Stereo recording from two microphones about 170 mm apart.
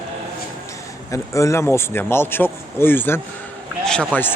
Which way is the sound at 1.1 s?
20° left (ahead or behind).